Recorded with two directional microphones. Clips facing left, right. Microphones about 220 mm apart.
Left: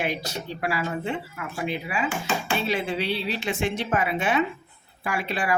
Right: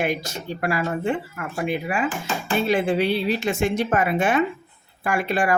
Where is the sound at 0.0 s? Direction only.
45° right (ahead or behind).